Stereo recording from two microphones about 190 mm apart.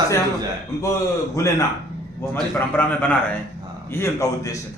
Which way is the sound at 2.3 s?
10° left (ahead or behind).